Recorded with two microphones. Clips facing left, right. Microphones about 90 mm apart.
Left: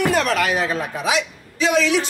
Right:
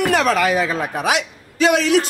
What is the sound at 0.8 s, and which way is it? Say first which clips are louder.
A man's voice: right 2 dB; 70° right (ahead or behind).